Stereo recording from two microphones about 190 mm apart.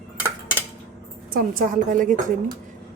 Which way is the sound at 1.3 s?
45° right (ahead or behind).